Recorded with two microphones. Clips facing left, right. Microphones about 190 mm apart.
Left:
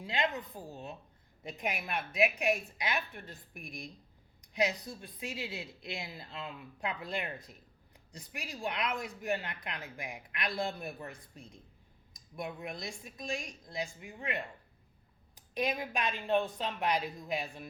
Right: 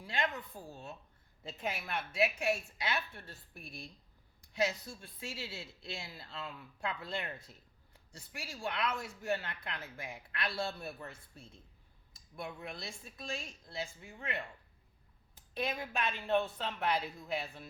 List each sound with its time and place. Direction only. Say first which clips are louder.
0.0 s speech: left 3 dB; 20° left (ahead or behind)